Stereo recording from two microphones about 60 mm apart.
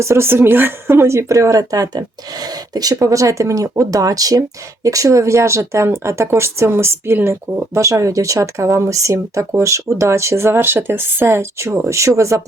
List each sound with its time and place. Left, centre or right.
0.0 s speech: right
2.4 s speech: right
7.5 s speech: right